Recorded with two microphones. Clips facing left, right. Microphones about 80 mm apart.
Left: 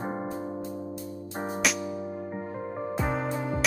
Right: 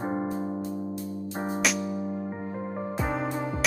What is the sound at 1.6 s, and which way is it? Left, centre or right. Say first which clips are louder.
Music: even; centre.